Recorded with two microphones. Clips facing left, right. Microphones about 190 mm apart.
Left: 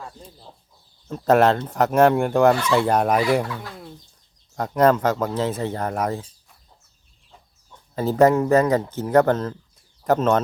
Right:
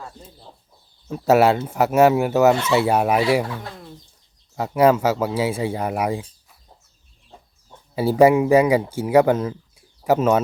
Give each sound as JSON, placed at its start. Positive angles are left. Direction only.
{"t": 1.0, "sound": "speech", "side_deg": -10}
{"t": 3.4, "sound": "speech", "side_deg": -25}
{"t": 4.5, "sound": "speech", "side_deg": -10}
{"t": 7.9, "sound": "speech", "side_deg": -10}